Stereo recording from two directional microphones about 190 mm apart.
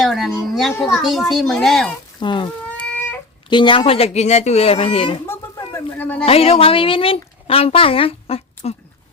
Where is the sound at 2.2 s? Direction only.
25° left (ahead or behind).